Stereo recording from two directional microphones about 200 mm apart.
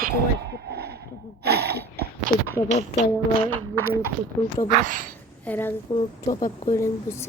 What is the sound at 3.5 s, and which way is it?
Speech, 90° right.